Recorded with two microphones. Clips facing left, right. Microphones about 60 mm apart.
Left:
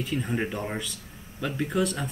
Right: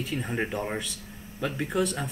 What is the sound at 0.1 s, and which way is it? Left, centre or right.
Speech, centre.